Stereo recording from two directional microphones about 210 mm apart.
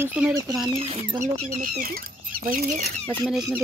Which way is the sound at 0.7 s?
30° right (ahead or behind).